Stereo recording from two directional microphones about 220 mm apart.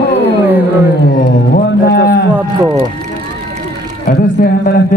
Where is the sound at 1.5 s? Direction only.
40° left (ahead or behind).